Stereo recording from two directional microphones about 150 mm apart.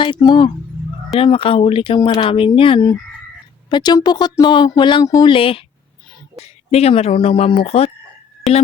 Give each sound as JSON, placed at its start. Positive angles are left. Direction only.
{"t": 0.0, "sound": "speech", "side_deg": 30}
{"t": 2.0, "sound": "speech", "side_deg": 25}
{"t": 5.3, "sound": "speech", "side_deg": 35}